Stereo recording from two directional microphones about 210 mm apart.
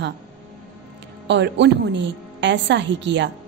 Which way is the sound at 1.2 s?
55° right (ahead or behind).